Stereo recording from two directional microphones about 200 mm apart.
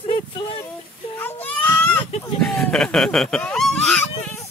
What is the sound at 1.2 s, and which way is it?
Baby cry, 10° left (ahead or behind).